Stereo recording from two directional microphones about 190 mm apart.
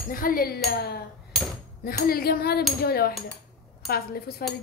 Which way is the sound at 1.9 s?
50° left (ahead or behind).